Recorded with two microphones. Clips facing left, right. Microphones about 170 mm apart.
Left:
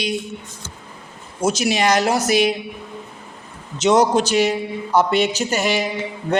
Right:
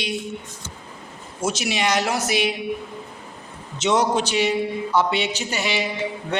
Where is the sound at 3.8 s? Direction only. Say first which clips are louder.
Left 5 dB; 40° left (ahead or behind).